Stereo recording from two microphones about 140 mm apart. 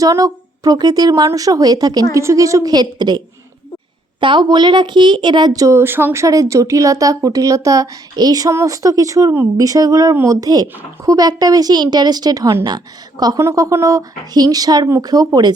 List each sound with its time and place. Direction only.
0.0 s a woman's voice: 25° right (ahead or behind)